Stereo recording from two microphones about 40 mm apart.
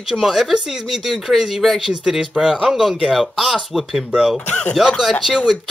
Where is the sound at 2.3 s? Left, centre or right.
Centre.